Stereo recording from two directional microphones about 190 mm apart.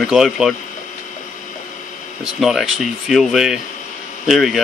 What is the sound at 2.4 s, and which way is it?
Speech, centre (ahead or behind).